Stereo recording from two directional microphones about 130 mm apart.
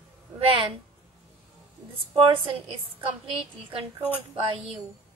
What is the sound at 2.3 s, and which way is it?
Speech, 45° right (ahead or behind).